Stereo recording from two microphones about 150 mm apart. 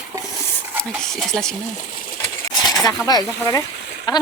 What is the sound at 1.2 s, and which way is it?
Speech, 5° left (ahead or behind).